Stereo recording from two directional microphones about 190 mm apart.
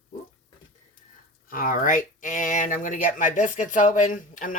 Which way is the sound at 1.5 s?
45° left (ahead or behind).